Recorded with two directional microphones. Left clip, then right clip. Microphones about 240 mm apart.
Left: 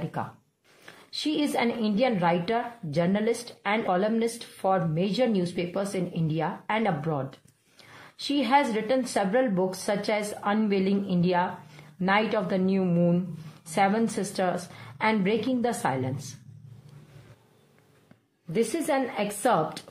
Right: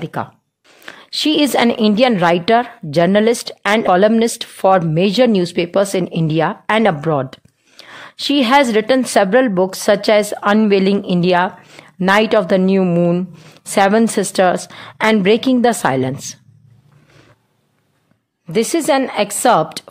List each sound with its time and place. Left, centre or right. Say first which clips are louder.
0.0 s a woman's voice: right 10 dB; right
18.5 s a woman's voice: right 11 dB; right